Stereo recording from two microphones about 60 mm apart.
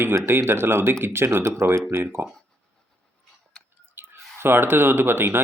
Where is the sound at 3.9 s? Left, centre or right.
Right.